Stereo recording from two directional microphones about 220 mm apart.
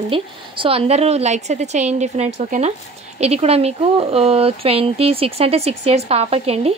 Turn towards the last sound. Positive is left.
turn(degrees=-25)  # may be behind; listen again after turning